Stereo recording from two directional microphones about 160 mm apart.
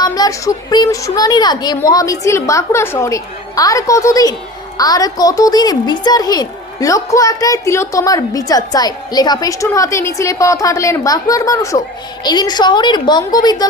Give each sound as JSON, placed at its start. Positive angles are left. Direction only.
{"t": 0.0, "sound": "a woman's voice", "side_deg": 20}